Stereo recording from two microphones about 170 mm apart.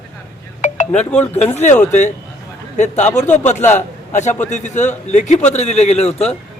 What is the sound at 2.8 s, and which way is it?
A man's voice, 45° left (ahead or behind).